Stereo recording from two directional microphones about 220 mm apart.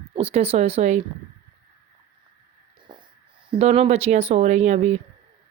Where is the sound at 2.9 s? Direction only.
20° right (ahead or behind).